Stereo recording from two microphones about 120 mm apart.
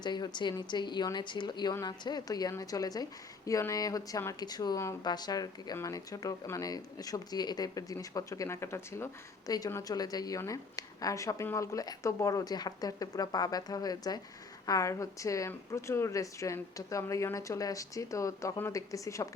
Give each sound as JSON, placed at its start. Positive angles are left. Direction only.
{"t": 0.0, "sound": "a woman's voice", "side_deg": 35}